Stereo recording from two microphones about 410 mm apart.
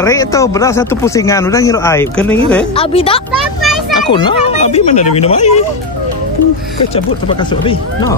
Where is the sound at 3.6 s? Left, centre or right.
Centre.